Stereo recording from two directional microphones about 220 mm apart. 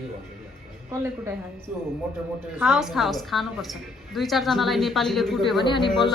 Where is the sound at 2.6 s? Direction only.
Centre (ahead or behind).